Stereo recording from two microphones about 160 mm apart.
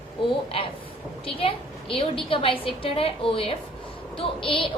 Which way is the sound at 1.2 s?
35° left (ahead or behind).